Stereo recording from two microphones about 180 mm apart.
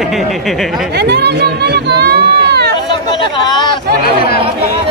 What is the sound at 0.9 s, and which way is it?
Speech, 65° right (ahead or behind).